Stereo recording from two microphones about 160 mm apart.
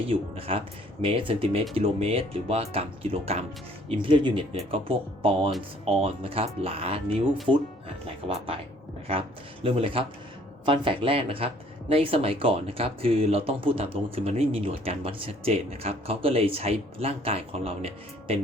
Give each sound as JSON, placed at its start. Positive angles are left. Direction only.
{"t": 0.1, "sound": "speech", "side_deg": -35}
{"t": 9.6, "sound": "speech", "side_deg": -35}